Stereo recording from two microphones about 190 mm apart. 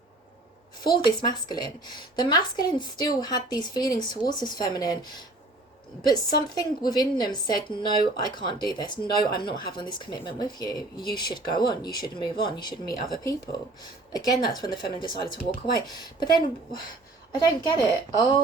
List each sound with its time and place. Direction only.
0.9 s a woman's voice: 25° left (ahead or behind)